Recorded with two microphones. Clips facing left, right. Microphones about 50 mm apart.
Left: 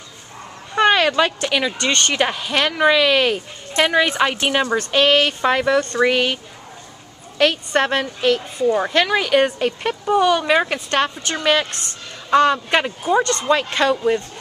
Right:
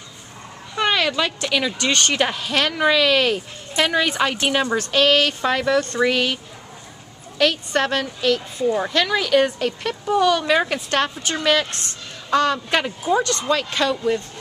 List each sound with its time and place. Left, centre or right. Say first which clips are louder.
0.7 s a sound: left 5 dB; left
1.5 s speech: left 1 dB; centre
1.8 s speech: left 1 dB; centre
4.9 s a woman's voice: left 1 dB; centre